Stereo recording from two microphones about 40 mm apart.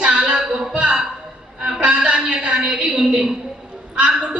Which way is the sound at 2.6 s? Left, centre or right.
Centre.